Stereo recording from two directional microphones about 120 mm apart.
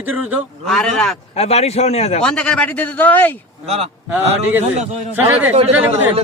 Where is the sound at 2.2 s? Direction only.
10° left (ahead or behind).